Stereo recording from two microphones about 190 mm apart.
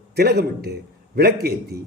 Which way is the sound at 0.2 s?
55° right (ahead or behind).